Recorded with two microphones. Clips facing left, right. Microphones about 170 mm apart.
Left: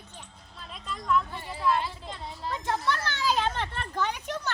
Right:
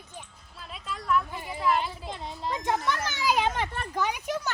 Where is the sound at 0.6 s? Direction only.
5° right (ahead or behind).